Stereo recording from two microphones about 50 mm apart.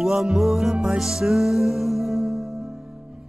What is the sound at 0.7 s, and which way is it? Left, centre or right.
Music, centre.